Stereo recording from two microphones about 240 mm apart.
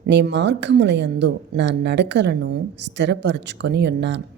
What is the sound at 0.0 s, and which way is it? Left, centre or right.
Speech, right.